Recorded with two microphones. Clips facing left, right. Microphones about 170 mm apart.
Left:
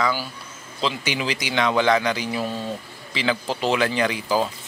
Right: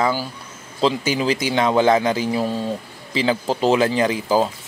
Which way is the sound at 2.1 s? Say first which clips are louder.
Right 5 dB; 45° right (ahead or behind).